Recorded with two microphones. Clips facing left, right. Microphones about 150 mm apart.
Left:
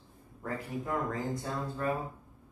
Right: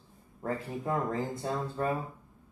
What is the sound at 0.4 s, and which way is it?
Speech, 30° right (ahead or behind).